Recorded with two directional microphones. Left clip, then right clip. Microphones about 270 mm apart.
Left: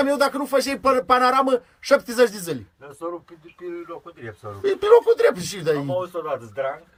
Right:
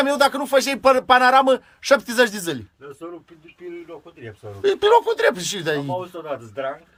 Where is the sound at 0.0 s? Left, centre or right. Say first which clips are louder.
Right 2 dB; centre.